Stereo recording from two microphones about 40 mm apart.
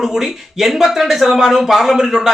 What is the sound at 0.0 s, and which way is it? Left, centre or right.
Speech, centre.